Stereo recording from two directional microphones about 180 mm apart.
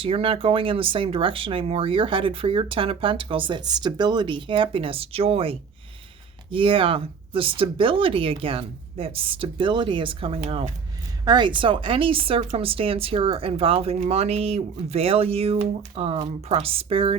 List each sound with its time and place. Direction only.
0.0 s speech: 30° right (ahead or behind)